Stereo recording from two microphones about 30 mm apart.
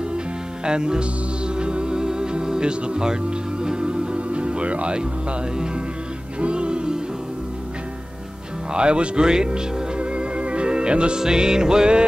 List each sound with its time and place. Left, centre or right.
0.7 s music: right
6.4 s music: right
8.7 s speech: right
9.9 s music: right